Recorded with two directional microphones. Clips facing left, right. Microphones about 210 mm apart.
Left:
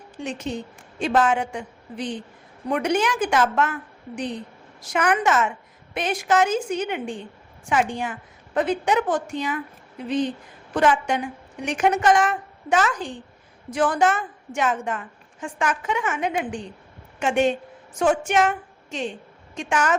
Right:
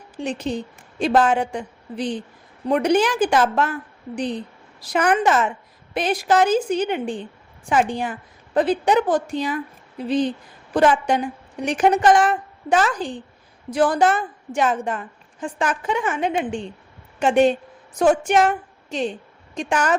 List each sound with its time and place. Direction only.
0.2 s a woman's voice: 35° right (ahead or behind)